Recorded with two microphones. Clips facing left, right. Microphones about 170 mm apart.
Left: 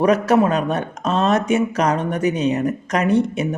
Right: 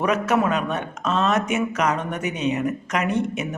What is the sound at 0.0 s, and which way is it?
Speech, 35° left (ahead or behind).